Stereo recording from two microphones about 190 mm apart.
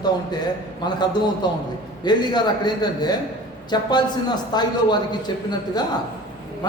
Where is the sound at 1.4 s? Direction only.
20° left (ahead or behind).